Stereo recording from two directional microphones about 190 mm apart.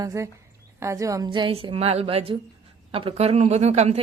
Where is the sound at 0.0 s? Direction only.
15° right (ahead or behind).